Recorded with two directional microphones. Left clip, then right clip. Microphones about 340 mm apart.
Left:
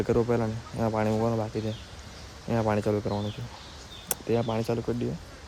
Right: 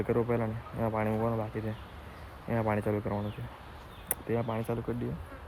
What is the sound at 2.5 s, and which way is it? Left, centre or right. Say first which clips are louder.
Speech: left 4 dB; centre.